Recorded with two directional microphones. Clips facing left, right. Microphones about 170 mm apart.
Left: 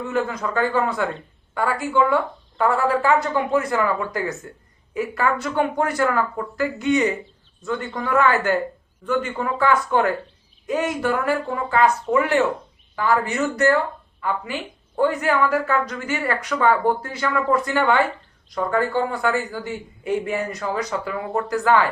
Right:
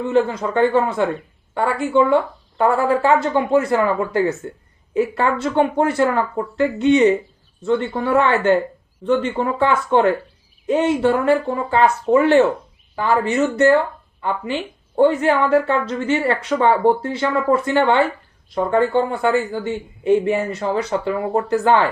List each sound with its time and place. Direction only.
0.0 s a woman's voice: 30° right (ahead or behind)